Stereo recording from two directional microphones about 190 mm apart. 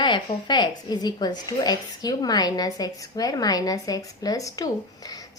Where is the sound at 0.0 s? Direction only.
25° left (ahead or behind).